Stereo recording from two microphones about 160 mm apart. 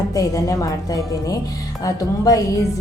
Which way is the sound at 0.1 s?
20° left (ahead or behind).